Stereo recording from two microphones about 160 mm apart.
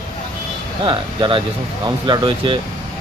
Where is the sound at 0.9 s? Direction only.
30° right (ahead or behind).